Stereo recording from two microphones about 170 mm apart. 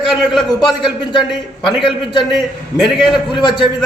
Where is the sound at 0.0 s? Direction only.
Centre (ahead or behind).